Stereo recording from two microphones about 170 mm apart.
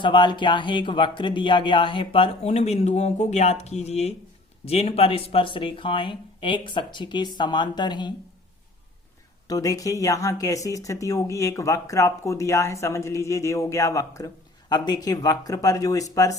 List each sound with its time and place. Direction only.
0.0 s speech: 30° left (ahead or behind)
9.5 s speech: 20° left (ahead or behind)